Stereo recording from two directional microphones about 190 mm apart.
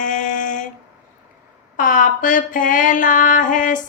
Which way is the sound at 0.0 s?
45° left (ahead or behind).